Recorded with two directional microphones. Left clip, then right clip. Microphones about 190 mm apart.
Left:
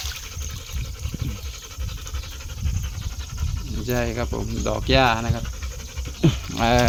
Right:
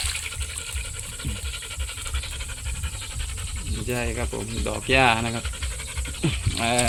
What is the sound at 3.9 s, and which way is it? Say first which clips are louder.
Speech: left 3 dB; 20° left (ahead or behind).